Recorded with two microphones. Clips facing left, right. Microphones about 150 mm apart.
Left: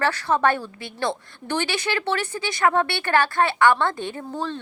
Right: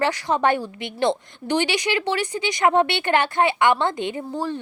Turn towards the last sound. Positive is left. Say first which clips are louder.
# right 2 dB
turn(degrees=-15)  # may be behind; listen again after turning